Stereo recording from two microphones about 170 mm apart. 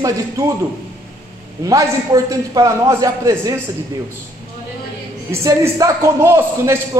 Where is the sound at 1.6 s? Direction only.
20° right (ahead or behind).